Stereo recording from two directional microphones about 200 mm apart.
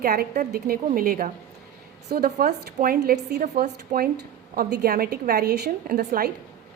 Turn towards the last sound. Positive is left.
turn(degrees=-50)  # may be behind; listen again after turning